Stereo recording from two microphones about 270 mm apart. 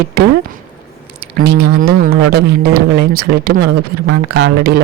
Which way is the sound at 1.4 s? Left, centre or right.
Right.